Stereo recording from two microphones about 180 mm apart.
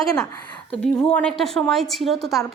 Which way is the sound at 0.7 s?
5° left (ahead or behind).